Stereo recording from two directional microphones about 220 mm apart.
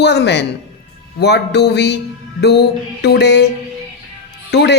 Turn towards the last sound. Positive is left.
turn(degrees=50)  # may be behind; listen again after turning